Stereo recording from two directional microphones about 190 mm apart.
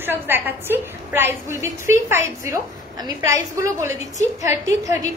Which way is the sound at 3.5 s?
15° right (ahead or behind).